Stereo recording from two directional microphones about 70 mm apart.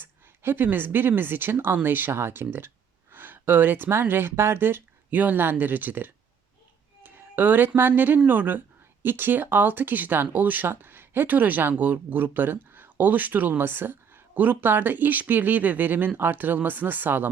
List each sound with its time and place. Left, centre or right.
0.0 s speech: right
7.0 s music: right
7.8 s speech: right